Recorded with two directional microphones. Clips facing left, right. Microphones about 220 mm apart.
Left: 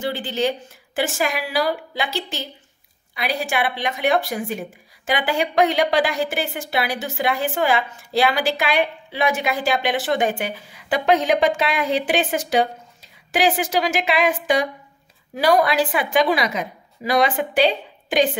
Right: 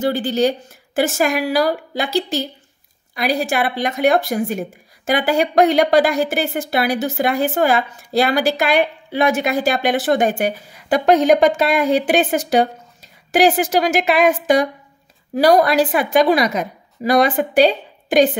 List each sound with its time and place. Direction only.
0.0 s a woman's voice: 40° right (ahead or behind)